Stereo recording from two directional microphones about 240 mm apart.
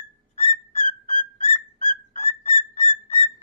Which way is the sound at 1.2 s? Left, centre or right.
Left.